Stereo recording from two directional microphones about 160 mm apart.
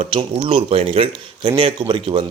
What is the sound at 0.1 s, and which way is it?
Speech, 30° right (ahead or behind).